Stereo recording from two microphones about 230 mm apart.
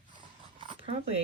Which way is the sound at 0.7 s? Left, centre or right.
Right.